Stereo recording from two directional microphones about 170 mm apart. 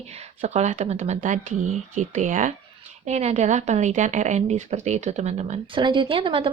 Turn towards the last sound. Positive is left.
turn(degrees=-30)  # may be behind; listen again after turning